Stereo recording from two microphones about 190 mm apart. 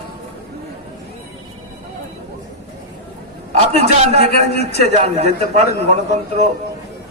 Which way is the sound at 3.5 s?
35° right (ahead or behind).